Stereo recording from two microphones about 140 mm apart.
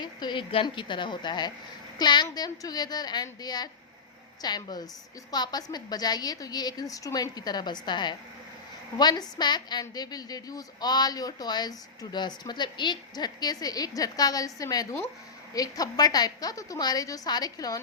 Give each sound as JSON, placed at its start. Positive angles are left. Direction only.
{"t": 0.0, "sound": "a woman's voice", "side_deg": 30}